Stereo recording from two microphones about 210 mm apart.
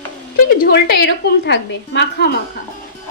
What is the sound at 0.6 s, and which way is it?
A woman's voice, 50° left (ahead or behind).